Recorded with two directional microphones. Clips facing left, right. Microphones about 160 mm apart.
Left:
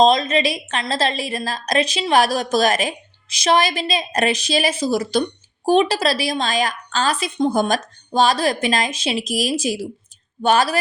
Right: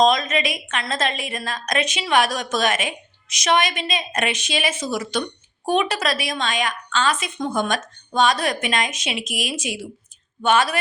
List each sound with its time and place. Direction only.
0.0 s a woman's voice: 30° left (ahead or behind)